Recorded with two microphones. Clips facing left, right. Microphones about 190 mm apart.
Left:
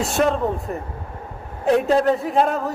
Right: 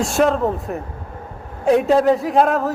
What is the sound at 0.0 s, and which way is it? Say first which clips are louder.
A man's voice: right 3 dB; centre (ahead or behind).